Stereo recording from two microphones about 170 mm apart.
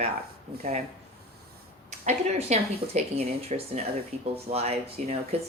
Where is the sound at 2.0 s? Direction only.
40° right (ahead or behind).